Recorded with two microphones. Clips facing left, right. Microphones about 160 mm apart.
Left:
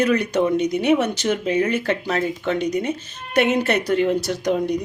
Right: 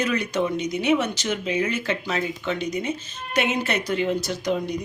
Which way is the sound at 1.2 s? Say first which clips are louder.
Left 5 dB; 45° left (ahead or behind).